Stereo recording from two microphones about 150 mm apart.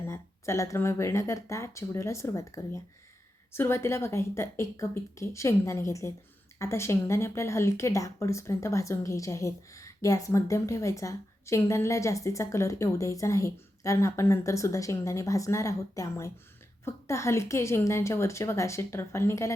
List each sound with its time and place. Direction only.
0.1 s speech: 20° left (ahead or behind)